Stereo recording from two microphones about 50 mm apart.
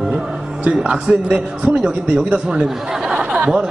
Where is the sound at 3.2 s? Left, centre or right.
Centre.